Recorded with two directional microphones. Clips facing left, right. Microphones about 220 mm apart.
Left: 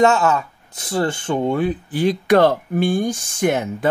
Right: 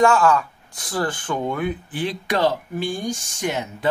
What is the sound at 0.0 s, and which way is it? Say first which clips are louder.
Speech: left 1 dB; 25° left (ahead or behind).